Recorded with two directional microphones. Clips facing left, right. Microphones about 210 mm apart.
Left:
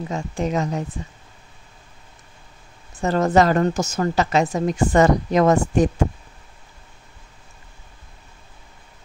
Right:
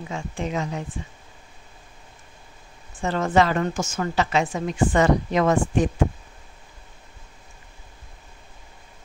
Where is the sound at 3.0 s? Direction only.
40° left (ahead or behind).